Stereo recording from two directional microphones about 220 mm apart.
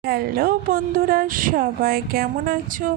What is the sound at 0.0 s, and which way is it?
Speech, 45° right (ahead or behind).